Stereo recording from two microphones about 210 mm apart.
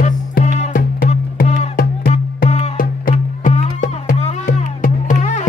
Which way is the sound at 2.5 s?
35° left (ahead or behind).